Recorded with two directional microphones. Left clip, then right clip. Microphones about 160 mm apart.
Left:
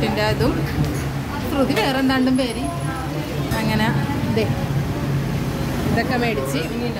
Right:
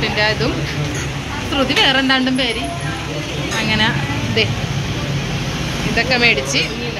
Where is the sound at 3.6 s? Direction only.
15° left (ahead or behind).